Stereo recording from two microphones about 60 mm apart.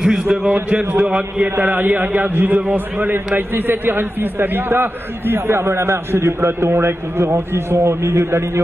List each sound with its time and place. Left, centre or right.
0.0 s a sound: centre
0.5 s a man's voice: right
1.6 s a man's voice: right